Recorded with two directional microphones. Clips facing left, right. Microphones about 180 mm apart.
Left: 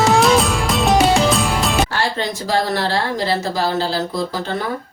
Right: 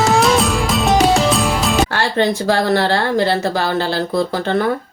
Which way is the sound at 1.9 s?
60° right (ahead or behind).